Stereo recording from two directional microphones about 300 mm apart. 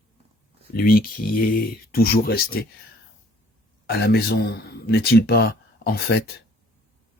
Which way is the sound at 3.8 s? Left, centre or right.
Left.